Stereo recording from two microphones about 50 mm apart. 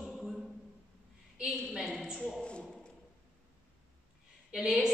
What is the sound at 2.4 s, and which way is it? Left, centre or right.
Speech, centre.